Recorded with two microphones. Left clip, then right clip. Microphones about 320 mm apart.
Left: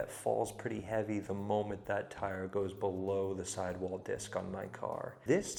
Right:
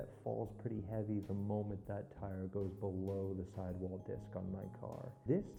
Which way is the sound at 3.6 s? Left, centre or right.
Centre.